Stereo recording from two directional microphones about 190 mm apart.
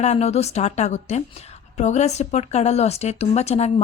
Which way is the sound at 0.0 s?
35° left (ahead or behind).